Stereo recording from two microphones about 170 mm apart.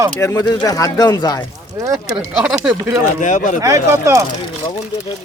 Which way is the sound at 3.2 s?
45° left (ahead or behind).